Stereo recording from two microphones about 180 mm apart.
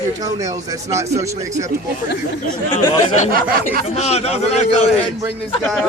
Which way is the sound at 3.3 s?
55° right (ahead or behind).